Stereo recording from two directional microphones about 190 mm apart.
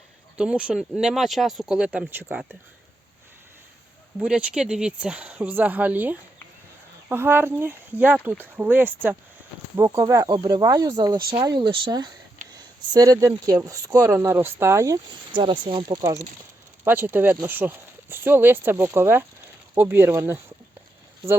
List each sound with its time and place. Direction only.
0.3 s speech: 5° right (ahead or behind)
4.2 s speech: 5° right (ahead or behind)